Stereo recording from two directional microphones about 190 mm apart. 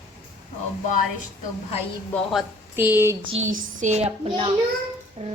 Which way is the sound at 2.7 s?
10° right (ahead or behind).